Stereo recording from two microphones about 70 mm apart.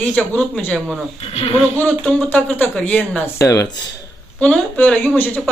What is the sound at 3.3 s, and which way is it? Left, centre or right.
Speech, left.